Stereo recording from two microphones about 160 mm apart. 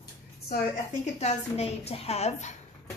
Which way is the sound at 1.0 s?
45° left (ahead or behind).